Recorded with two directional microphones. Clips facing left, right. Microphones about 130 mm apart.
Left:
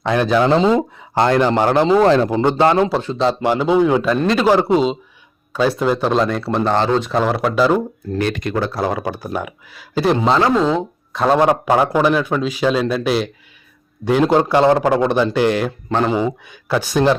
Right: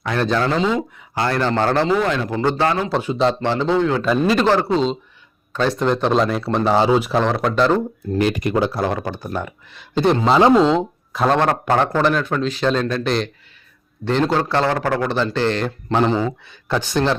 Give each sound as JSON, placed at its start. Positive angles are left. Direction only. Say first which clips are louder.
{"t": 0.2, "sound": "speech", "louder": "left 3 dB", "side_deg": 15}
{"t": 0.5, "sound": "speech", "louder": "left 5 dB", "side_deg": 30}
{"t": 1.3, "sound": "speech", "louder": "left 3 dB", "side_deg": 15}
{"t": 2.0, "sound": "a man's voice", "louder": "left 7 dB", "side_deg": 35}
{"t": 2.3, "sound": "speech", "louder": "left 4 dB", "side_deg": 20}
{"t": 3.4, "sound": "speech", "louder": "left 3 dB", "side_deg": 15}
{"t": 4.0, "sound": "a man's voice", "louder": "even", "side_deg": -5}
{"t": 4.4, "sound": "a man's voice", "louder": "left 3 dB", "side_deg": 15}
{"t": 7.2, "sound": "a man's voice", "louder": "left 1 dB", "side_deg": 5}
{"t": 8.1, "sound": "speech", "louder": "right 2 dB", "side_deg": -15}
{"t": 8.7, "sound": "a man's voice", "louder": "left 1 dB", "side_deg": 5}
{"t": 11.3, "sound": "speech", "louder": "left 3 dB", "side_deg": 10}